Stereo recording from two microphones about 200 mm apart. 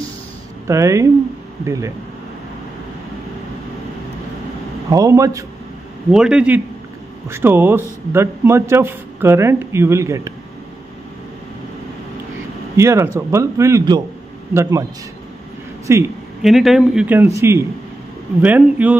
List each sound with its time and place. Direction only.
0.7 s a man's voice: 15° right (ahead or behind)
4.8 s a man's voice: 15° right (ahead or behind)
6.1 s a man's voice: 5° right (ahead or behind)
12.7 s a man's voice: 15° right (ahead or behind)
15.9 s a man's voice: 15° right (ahead or behind)
16.4 s a man's voice: centre (ahead or behind)